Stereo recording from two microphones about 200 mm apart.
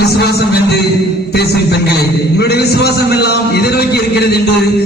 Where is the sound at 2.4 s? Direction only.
55° left (ahead or behind).